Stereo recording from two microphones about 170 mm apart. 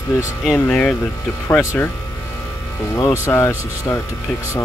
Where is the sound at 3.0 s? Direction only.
15° left (ahead or behind).